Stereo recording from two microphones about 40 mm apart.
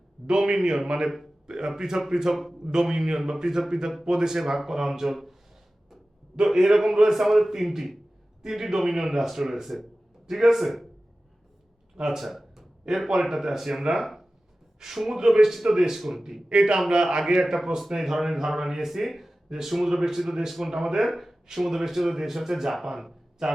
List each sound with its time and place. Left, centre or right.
0.3 s a man's voice: centre
2.3 s a man's voice: centre
6.3 s speech: centre
12.0 s speech: centre
16.5 s a man's voice: centre